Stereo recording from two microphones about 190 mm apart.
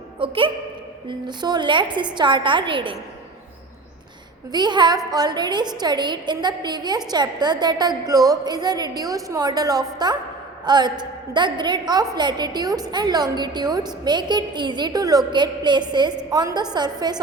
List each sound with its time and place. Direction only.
0.2 s a woman's voice: 25° right (ahead or behind)
4.5 s a woman's voice: 25° right (ahead or behind)